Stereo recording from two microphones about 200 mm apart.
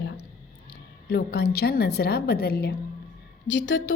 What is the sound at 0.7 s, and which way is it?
A woman's voice, 55° left (ahead or behind).